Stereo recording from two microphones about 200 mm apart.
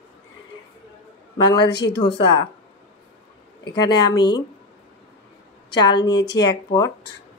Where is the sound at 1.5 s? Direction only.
25° left (ahead or behind).